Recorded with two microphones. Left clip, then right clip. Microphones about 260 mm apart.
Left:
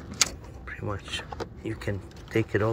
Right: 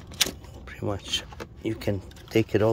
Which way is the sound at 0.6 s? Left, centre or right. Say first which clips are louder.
Right 3 dB; centre.